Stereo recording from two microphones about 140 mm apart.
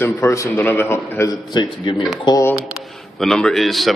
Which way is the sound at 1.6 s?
35° left (ahead or behind).